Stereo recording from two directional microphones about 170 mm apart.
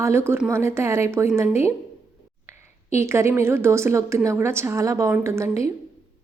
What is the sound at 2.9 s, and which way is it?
A woman's voice, 15° right (ahead or behind).